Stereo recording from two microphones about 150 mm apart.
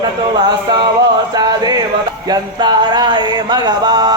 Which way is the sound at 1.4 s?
25° right (ahead or behind).